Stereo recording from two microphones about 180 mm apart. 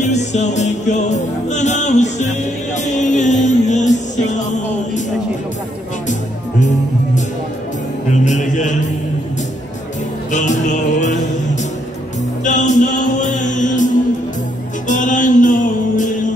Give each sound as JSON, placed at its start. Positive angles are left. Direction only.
{"t": 0.0, "sound": "music", "side_deg": 40}
{"t": 8.1, "sound": "music", "side_deg": 40}
{"t": 10.3, "sound": "music", "side_deg": 45}
{"t": 12.4, "sound": "music", "side_deg": 45}